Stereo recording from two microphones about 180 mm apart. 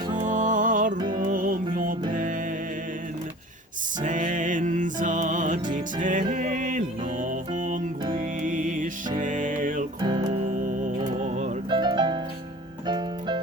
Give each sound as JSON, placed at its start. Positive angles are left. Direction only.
{"t": 0.2, "sound": "music", "side_deg": -45}
{"t": 0.9, "sound": "music", "side_deg": -25}
{"t": 1.2, "sound": "music", "side_deg": -50}
{"t": 4.0, "sound": "music", "side_deg": -45}
{"t": 10.0, "sound": "music", "side_deg": -25}
{"t": 10.2, "sound": "music", "side_deg": -45}
{"t": 11.7, "sound": "music", "side_deg": -25}